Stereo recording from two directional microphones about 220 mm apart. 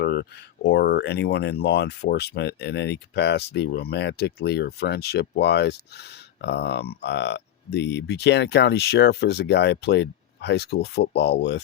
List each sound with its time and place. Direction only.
0.0 s speech: 45° left (ahead or behind)